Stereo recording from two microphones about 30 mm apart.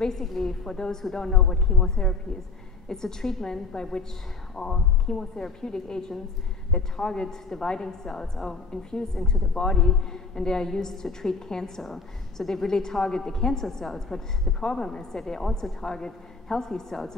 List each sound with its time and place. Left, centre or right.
0.2 s a woman's voice: centre
0.5 s a woman's voice: centre
3.7 s a woman's voice: left
14.6 s a woman's voice: left